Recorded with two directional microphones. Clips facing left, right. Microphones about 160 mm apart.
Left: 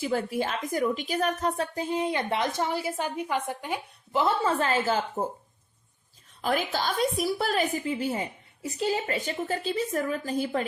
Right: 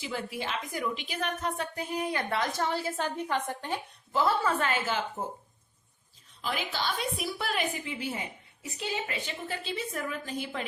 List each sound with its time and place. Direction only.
0.0 s a woman's voice: 45° left (ahead or behind); by 4.5 s 20° left (ahead or behind)
4.6 s a woman's voice: 35° left (ahead or behind)
6.4 s a woman's voice: 45° left (ahead or behind)